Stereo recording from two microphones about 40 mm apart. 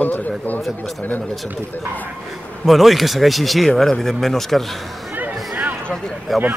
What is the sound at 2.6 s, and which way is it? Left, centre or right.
A man's voice, centre.